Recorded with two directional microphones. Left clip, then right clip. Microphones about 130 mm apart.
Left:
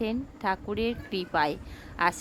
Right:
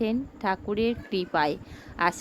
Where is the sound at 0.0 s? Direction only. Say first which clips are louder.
Right 2 dB; 30° right (ahead or behind).